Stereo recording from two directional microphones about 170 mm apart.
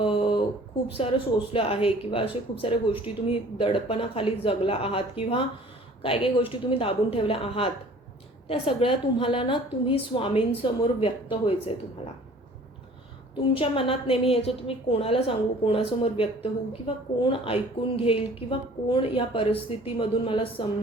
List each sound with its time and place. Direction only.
0.0 s a sound: 30° left (ahead or behind)
1.0 s a woman's voice: 35° left (ahead or behind)
13.5 s a woman's voice: 30° left (ahead or behind)